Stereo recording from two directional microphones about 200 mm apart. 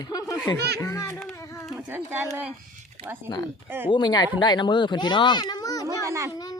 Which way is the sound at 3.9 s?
20° left (ahead or behind).